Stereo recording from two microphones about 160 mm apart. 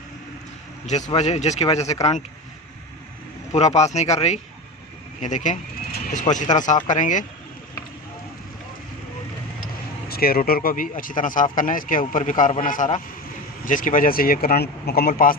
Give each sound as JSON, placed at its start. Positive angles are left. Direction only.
{"t": 0.9, "sound": "speech", "side_deg": 45}
{"t": 3.8, "sound": "speech", "side_deg": 45}
{"t": 6.3, "sound": "speech", "side_deg": 35}
{"t": 6.6, "sound": "speech", "side_deg": 50}
{"t": 10.1, "sound": "speech", "side_deg": 70}